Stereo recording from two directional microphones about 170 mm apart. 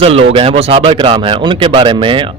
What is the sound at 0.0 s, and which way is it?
A man's voice, 35° right (ahead or behind).